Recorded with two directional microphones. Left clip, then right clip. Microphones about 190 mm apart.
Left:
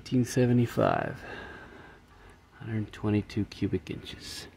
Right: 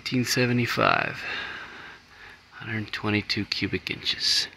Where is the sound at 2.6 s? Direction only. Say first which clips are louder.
Right 7 dB; 15° left (ahead or behind).